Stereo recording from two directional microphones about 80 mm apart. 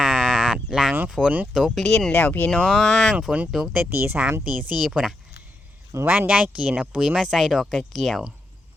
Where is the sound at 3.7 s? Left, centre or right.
Right.